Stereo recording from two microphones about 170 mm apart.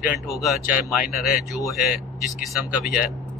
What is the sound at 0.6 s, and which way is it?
Speech, 60° left (ahead or behind).